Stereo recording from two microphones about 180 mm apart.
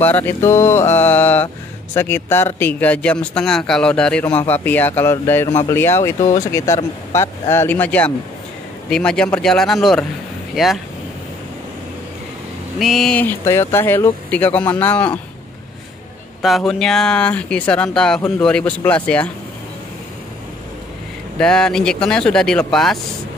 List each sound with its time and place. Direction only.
0.0 s speech: 10° left (ahead or behind)
12.7 s speech: centre (ahead or behind)
16.4 s speech: centre (ahead or behind)
21.4 s speech: 5° left (ahead or behind)